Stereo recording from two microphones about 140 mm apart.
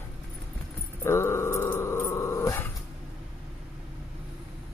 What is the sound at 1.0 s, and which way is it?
Dog, 20° left (ahead or behind).